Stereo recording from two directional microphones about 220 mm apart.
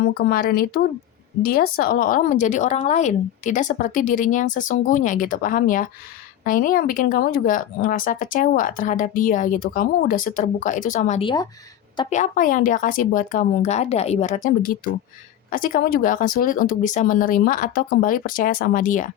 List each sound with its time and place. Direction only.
0.0 s speech: 45° left (ahead or behind)
11.2 s speech: 20° left (ahead or behind)
12.1 s speech: 35° left (ahead or behind)